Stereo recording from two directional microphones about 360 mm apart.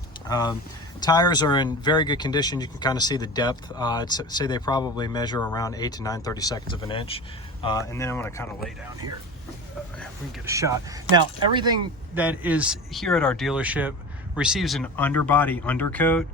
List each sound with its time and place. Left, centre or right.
0.3 s speech: centre
10.0 s speech: centre